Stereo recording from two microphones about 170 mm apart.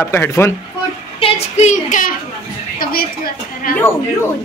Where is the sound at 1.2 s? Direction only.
40° left (ahead or behind).